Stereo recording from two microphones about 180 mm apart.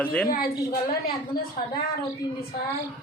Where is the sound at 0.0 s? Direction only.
5° left (ahead or behind).